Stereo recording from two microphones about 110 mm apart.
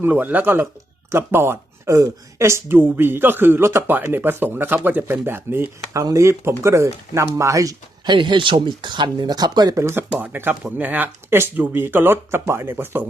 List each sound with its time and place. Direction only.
0.0 s speech: 15° right (ahead or behind); by 8.1 s 30° right (ahead or behind)
8.1 s speech: 45° right (ahead or behind)
9.8 s speech: 20° right (ahead or behind)